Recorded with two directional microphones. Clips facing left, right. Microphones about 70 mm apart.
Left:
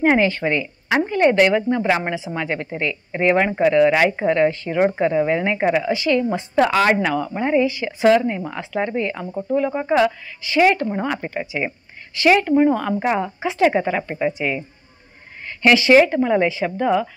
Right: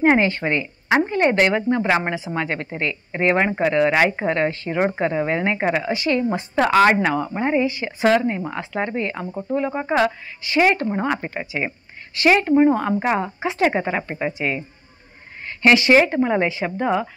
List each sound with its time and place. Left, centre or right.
0.0 s speech: right
4.3 s speech: right
15.9 s speech: right